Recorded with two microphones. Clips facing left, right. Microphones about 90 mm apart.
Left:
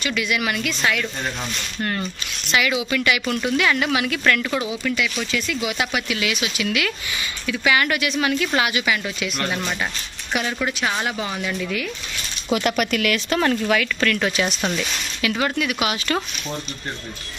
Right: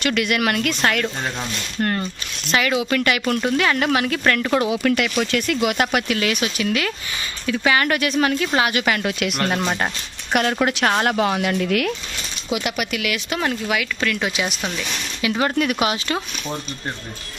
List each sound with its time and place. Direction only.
0.0 s speech: 55° right (ahead or behind)
2.5 s speech: 40° right (ahead or behind)
4.6 s speech: 60° right (ahead or behind)
10.3 s speech: 55° right (ahead or behind)
12.5 s speech: 5° right (ahead or behind)
15.2 s speech: 30° right (ahead or behind)
15.5 s speech: 40° right (ahead or behind)